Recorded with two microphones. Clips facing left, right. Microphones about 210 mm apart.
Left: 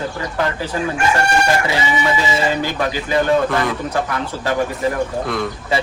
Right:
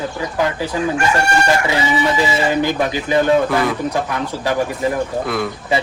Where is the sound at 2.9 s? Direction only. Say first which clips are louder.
Even; 15° right (ahead or behind).